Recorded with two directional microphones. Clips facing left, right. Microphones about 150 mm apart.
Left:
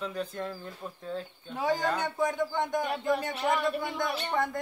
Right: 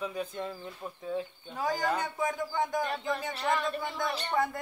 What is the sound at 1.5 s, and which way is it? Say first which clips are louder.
A man's voice: left 2 dB; centre (ahead or behind).